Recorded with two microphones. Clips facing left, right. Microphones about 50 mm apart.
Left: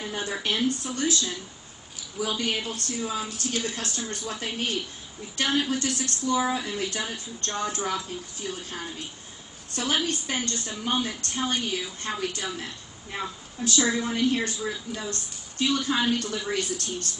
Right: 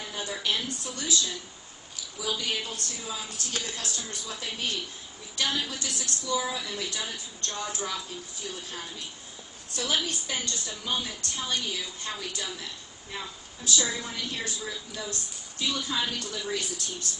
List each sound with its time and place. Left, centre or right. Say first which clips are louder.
0.0 s a woman's voice: left 3 dB; left
2.4 s a woman's voice: left 3 dB; left